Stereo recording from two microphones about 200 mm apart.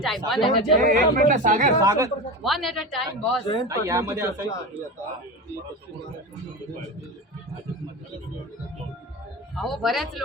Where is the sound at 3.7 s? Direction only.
15° right (ahead or behind).